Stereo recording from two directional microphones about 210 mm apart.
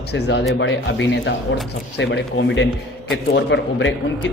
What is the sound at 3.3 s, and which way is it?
Speech, 60° left (ahead or behind).